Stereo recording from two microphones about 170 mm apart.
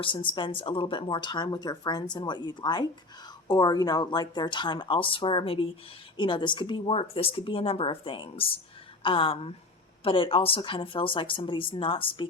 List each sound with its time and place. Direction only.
0.0 s speech: 30° left (ahead or behind)